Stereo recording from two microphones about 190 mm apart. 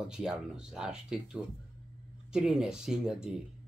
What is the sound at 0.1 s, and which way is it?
Speech, 5° right (ahead or behind).